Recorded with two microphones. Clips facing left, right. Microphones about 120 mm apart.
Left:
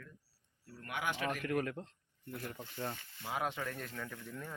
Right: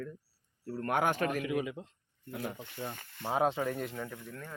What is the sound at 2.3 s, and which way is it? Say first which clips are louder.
Speech: right 6 dB; 60° right (ahead or behind).